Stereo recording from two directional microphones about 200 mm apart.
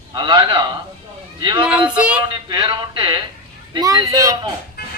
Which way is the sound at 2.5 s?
20° right (ahead or behind).